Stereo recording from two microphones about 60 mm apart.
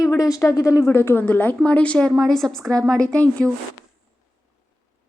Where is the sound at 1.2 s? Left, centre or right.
Left.